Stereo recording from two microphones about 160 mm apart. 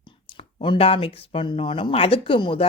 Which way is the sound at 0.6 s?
35° left (ahead or behind).